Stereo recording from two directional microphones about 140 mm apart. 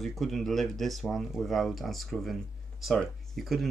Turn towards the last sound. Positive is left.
turn(degrees=0)  # may be behind; listen again after turning